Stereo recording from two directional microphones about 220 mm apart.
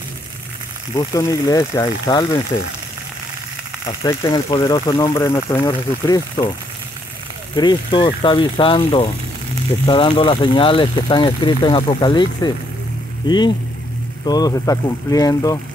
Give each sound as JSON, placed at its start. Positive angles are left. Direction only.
{"t": 0.9, "sound": "speech", "side_deg": 15}
{"t": 4.0, "sound": "speech", "side_deg": 15}
{"t": 7.5, "sound": "speech", "side_deg": 20}
{"t": 14.2, "sound": "speech", "side_deg": 15}